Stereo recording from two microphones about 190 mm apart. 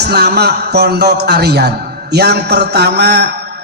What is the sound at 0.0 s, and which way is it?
A man's voice, 60° right (ahead or behind).